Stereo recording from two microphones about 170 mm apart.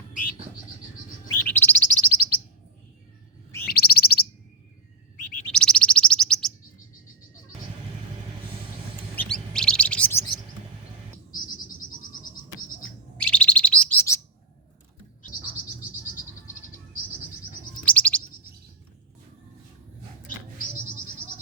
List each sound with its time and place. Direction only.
1.3 s bird: 10° left (ahead or behind)
3.7 s bird: 65° left (ahead or behind)
5.5 s bird: 5° left (ahead or behind)
9.1 s bird: 5° left (ahead or behind)
12.1 s insect: 55° left (ahead or behind)
13.1 s bird: 5° left (ahead or behind)
17.8 s chirp: 10° left (ahead or behind)